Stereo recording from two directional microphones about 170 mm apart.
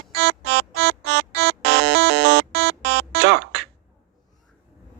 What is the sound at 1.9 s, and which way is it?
Music, 90° right.